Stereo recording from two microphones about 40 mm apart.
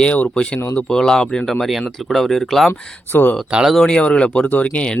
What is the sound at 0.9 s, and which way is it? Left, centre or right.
Speech, centre.